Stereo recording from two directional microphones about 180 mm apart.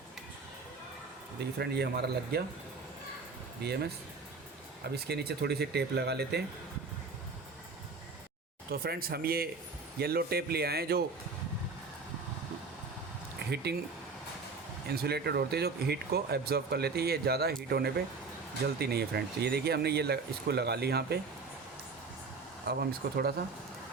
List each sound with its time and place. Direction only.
1.4 s speech: 65° right (ahead or behind)
3.6 s speech: 65° right (ahead or behind)
4.9 s speech: 65° right (ahead or behind)
8.7 s speech: 55° right (ahead or behind)
14.8 s speech: 60° right (ahead or behind)
22.6 s speech: 60° right (ahead or behind)